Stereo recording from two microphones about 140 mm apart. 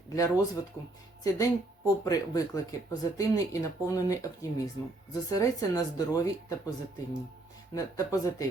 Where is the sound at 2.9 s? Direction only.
25° left (ahead or behind).